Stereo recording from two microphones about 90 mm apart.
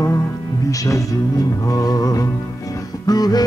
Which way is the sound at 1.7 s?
45° left (ahead or behind).